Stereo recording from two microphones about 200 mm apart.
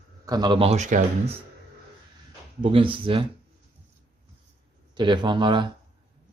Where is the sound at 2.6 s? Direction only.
25° right (ahead or behind).